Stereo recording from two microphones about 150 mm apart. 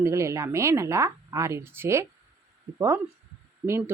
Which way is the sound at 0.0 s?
20° right (ahead or behind).